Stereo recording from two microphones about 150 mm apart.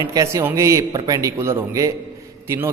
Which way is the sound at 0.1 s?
20° right (ahead or behind).